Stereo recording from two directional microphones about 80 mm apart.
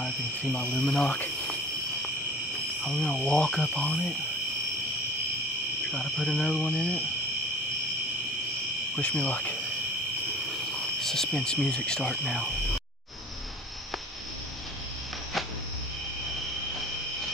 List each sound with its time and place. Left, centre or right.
0.4 s speech: centre
2.8 s cricket: centre
5.9 s cricket: centre
9.0 s speech: centre
11.0 s speech: centre